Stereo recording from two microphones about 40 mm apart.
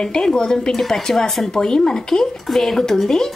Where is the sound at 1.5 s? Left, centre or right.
Centre.